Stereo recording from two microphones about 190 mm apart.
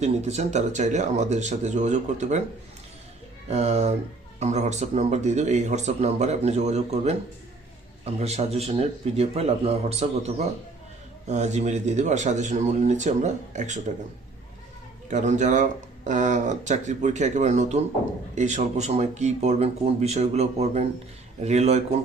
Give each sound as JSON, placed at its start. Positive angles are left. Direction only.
{"t": 0.0, "sound": "a man's voice", "side_deg": -35}
{"t": 3.5, "sound": "a man's voice", "side_deg": -35}
{"t": 15.1, "sound": "a man's voice", "side_deg": -40}